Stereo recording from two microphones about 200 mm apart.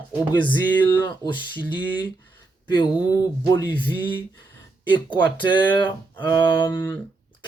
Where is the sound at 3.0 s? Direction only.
15° left (ahead or behind).